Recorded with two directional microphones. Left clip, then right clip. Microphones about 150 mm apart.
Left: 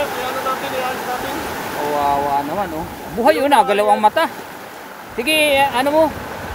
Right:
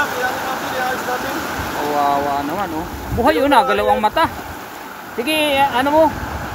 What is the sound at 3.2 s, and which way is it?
Speech, 30° left (ahead or behind).